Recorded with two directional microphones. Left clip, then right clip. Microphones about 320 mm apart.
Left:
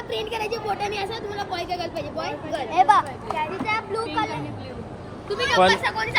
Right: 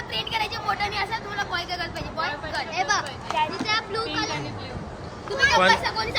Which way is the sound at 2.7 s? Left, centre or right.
Centre.